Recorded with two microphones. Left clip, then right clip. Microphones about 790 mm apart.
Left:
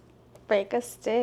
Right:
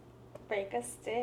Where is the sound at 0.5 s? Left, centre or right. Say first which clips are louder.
Left 10 dB; left.